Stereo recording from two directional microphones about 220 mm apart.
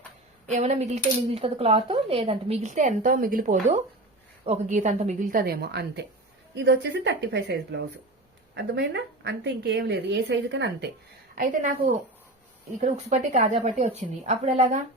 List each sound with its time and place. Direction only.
0.4 s a woman's voice: 30° right (ahead or behind); by 10.9 s 50° right (ahead or behind)
11.4 s speech: 40° right (ahead or behind)
12.8 s speech: 35° right (ahead or behind)